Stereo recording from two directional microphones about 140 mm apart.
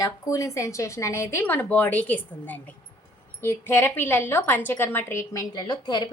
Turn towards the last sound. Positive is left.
turn(degrees=30)  # may be behind; listen again after turning